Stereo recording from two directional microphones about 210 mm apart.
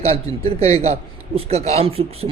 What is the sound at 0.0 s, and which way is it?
A man's voice, 30° right (ahead or behind).